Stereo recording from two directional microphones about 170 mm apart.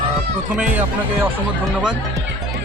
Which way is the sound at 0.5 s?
10° right (ahead or behind).